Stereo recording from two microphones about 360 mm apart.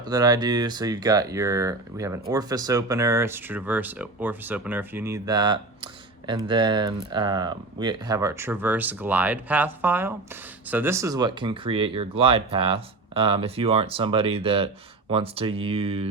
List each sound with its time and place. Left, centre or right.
0.0 s speech: centre